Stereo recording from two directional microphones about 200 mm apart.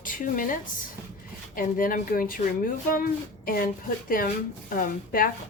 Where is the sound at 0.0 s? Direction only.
45° left (ahead or behind).